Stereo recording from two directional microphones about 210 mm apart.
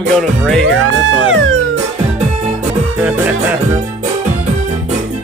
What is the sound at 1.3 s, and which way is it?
Music, 65° right (ahead or behind).